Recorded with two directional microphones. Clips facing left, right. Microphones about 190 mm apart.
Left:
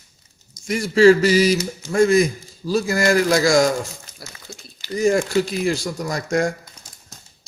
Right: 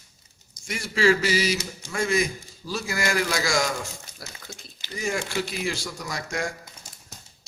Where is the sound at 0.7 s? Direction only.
40° left (ahead or behind).